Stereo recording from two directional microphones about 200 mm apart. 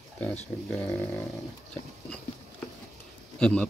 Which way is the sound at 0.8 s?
10° left (ahead or behind).